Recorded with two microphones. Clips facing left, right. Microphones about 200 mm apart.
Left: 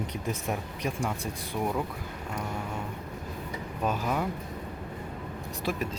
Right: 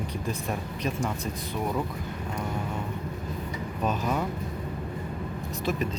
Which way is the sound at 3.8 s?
5° left (ahead or behind).